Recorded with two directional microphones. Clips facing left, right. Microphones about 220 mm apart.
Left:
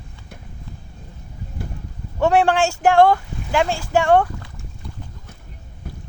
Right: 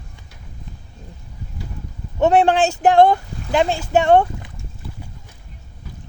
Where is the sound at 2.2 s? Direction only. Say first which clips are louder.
Right 2 dB; 20° right (ahead or behind).